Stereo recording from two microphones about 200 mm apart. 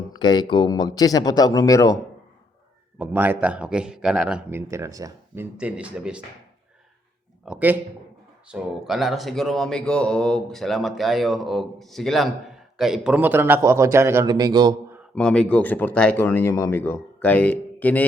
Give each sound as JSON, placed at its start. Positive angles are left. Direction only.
{"t": 0.2, "sound": "speech", "side_deg": 20}
{"t": 3.0, "sound": "speech", "side_deg": -10}
{"t": 7.4, "sound": "speech", "side_deg": -5}
{"t": 15.1, "sound": "speech", "side_deg": 5}